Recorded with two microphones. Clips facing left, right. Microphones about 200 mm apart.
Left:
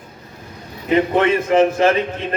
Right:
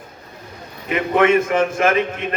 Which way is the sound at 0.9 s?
30° left (ahead or behind).